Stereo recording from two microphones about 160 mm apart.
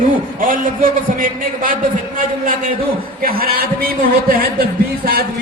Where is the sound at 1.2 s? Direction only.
60° right (ahead or behind).